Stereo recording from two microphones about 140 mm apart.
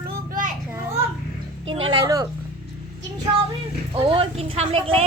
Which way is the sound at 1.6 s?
40° right (ahead or behind).